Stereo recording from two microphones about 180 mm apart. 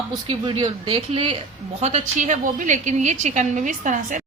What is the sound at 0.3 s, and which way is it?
A woman's voice, 30° right (ahead or behind).